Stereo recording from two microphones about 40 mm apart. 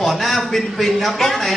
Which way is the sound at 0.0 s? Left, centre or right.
Centre.